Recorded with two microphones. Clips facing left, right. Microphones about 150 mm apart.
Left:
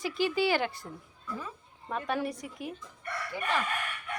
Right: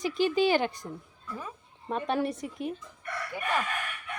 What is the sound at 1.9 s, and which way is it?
Speech, 25° right (ahead or behind).